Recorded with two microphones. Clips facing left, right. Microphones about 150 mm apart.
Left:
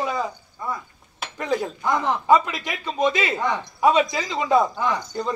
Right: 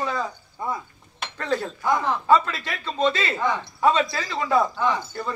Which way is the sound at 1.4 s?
15° left (ahead or behind).